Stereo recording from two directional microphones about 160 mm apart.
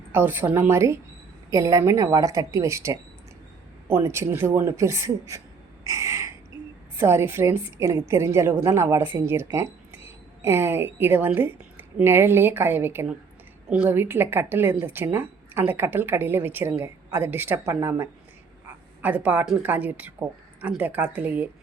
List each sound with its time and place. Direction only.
0.1 s a woman's voice: 15° right (ahead or behind)
5.8 s a sound: 20° right (ahead or behind)
6.9 s speech: 15° right (ahead or behind)